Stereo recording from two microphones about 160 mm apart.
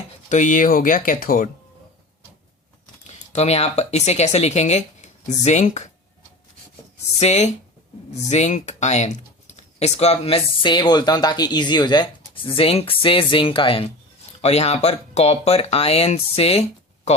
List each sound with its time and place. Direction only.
0.3 s speech: 50° left (ahead or behind)
3.3 s speech: 40° left (ahead or behind)
7.2 s speech: 45° left (ahead or behind)